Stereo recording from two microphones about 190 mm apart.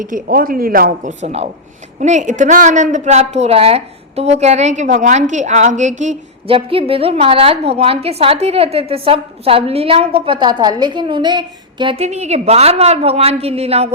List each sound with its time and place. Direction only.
0.0 s a woman's voice: 45° right (ahead or behind)